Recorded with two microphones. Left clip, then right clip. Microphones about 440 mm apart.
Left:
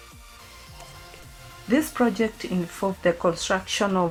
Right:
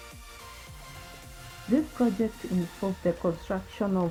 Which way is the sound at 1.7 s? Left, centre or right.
Left.